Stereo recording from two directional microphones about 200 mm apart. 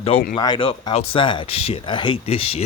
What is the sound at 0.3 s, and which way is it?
Speech, 20° left (ahead or behind).